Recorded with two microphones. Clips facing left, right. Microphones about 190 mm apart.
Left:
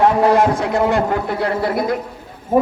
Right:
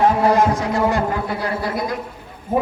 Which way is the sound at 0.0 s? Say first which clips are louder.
Left 2 dB; 65° left (ahead or behind).